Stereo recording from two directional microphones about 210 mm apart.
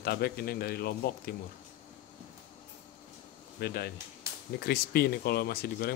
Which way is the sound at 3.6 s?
50° left (ahead or behind).